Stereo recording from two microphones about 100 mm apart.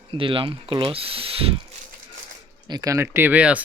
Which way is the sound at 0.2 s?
60° right (ahead or behind).